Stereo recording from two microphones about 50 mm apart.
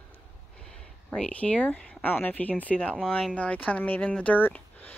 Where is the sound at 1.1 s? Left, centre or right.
Left.